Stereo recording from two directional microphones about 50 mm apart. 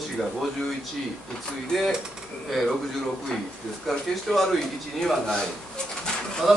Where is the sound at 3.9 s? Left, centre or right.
Centre.